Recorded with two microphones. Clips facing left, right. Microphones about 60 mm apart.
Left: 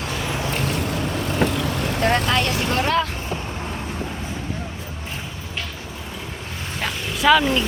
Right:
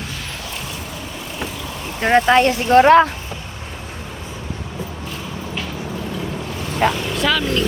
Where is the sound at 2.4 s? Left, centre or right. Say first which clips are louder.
Right 10 dB; right.